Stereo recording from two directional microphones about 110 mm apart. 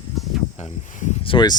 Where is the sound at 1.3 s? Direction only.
40° left (ahead or behind).